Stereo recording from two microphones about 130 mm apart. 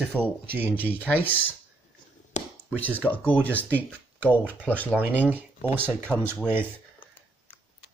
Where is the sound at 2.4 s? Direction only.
65° left (ahead or behind).